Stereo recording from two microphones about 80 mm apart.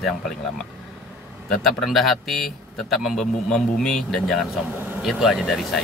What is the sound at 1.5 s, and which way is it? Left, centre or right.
Speech, centre.